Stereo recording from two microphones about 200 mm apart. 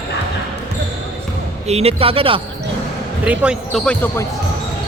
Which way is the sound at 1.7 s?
30° right (ahead or behind).